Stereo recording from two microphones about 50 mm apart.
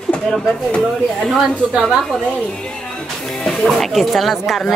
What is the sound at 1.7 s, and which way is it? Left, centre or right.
Speech, centre.